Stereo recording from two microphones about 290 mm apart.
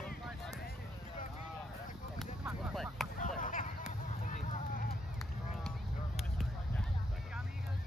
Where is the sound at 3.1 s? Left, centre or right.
Left.